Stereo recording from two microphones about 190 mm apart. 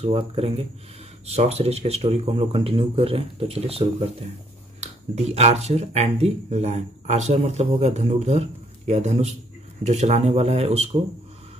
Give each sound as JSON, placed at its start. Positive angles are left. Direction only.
{"t": 0.0, "sound": "speech", "side_deg": -30}